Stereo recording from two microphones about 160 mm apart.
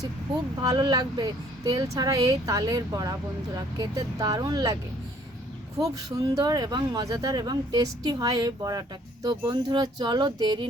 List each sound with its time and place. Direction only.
0.6 s speech: 25° right (ahead or behind)
5.8 s speech: 20° right (ahead or behind)